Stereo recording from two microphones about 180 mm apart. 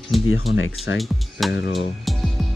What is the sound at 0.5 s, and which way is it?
Speech, 90° left.